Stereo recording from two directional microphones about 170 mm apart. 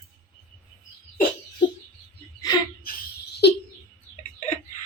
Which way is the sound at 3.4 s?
75° left (ahead or behind).